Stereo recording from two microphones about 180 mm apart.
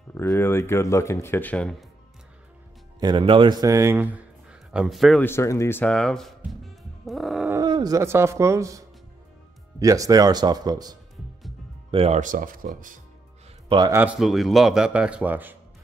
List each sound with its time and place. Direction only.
0.1 s speech: 15° left (ahead or behind)
3.0 s speech: 25° right (ahead or behind); by 5.2 s centre (ahead or behind)
5.2 s speech: 15° left (ahead or behind)
7.1 s roaring cats: centre (ahead or behind)
7.5 s speech: 20° right (ahead or behind)
11.9 s speech: 30° right (ahead or behind)
12.2 s speech: 50° right (ahead or behind)
13.7 s a man's voice: 25° right (ahead or behind)
13.9 s speech: 5° right (ahead or behind)